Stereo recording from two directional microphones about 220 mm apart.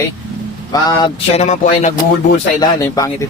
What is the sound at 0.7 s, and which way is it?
Speech, 20° left (ahead or behind).